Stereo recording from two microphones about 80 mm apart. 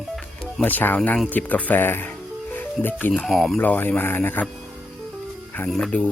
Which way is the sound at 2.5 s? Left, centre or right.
Left.